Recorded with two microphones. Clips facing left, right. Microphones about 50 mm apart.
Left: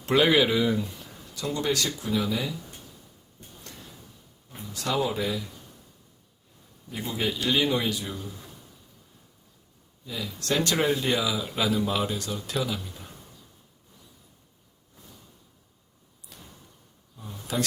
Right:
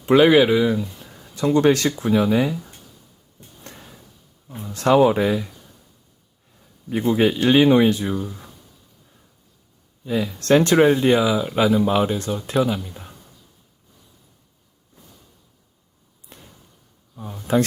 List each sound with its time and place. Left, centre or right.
0.0 s speech: centre
0.5 s speech: centre
0.8 s a sound: centre
1.2 s speech: right
4.6 s speech: right
7.1 s speech: right
10.1 s speech: right
16.3 s a sound: right
17.2 s speech: right